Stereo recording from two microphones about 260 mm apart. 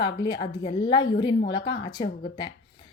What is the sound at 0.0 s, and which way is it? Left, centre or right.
A woman's voice, centre.